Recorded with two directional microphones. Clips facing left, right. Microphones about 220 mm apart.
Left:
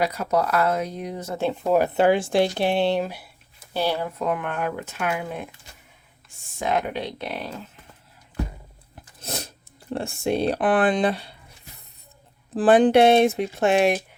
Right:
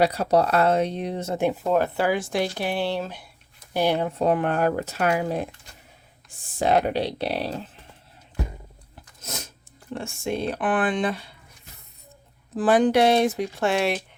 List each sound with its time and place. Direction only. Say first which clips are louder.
0.0 s speech: right 3 dB; 30° right (ahead or behind)
1.4 s speech: right 1 dB; 15° right (ahead or behind)
1.6 s speech: left 4 dB; 10° left (ahead or behind)
2.0 s speech: left 5 dB; 25° left (ahead or behind); by 3.7 s 10° left (ahead or behind)
3.8 s speech: right 3 dB; 20° right (ahead or behind); by 5.5 s 35° right (ahead or behind)
6.6 s speech: right 4 dB; 35° right (ahead or behind)
9.2 s a sound: left 4 dB; 35° left (ahead or behind)
9.9 s speech: left 4 dB; 35° left (ahead or behind)
12.5 s speech: left 3 dB; 30° left (ahead or behind)